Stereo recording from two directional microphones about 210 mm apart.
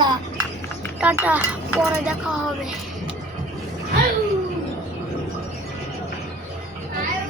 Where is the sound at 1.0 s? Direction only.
5° right (ahead or behind).